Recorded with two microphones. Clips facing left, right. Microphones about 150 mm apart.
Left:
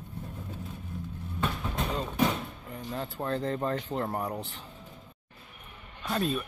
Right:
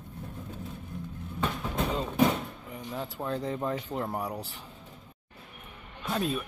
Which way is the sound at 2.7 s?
15° right (ahead or behind).